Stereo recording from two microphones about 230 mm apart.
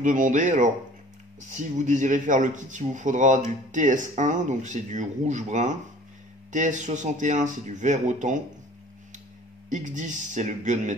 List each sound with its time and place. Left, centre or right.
0.0 s speech: right
9.7 s speech: right